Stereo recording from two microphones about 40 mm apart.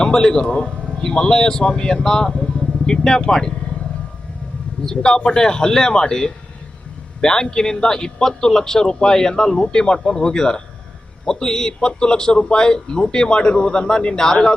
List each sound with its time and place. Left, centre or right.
0.0 s a man's voice: centre
4.8 s a man's voice: centre